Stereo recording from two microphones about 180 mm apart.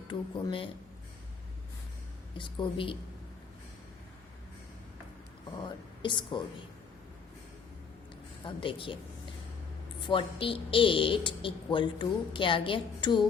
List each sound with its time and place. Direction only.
0.1 s a woman's voice: 25° left (ahead or behind)
2.4 s a woman's voice: 30° left (ahead or behind)
5.6 s speech: 25° left (ahead or behind)
8.4 s a woman's voice: 30° left (ahead or behind)
10.0 s a woman's voice: 30° left (ahead or behind)